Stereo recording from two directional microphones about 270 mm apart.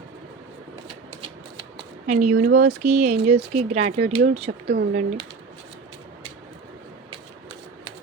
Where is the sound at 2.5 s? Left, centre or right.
Right.